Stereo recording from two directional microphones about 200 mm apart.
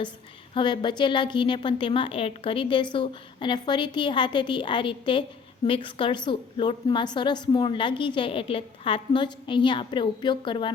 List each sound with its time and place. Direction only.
0.5 s a woman's voice: 25° left (ahead or behind)